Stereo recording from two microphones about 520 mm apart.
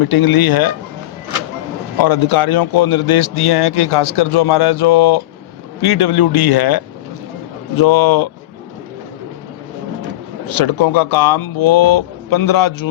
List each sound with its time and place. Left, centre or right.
0.0 s a man's voice: left
2.0 s a man's voice: left
10.6 s a man's voice: left